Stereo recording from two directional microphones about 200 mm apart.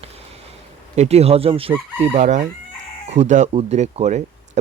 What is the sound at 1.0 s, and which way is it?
Speech, 30° right (ahead or behind).